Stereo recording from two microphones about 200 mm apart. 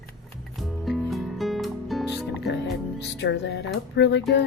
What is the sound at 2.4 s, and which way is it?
Music, 55° left (ahead or behind).